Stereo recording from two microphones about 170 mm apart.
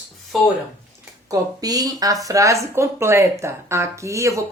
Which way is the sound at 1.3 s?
20° right (ahead or behind).